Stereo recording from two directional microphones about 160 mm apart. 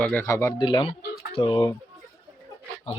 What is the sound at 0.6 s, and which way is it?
Speech, 30° left (ahead or behind).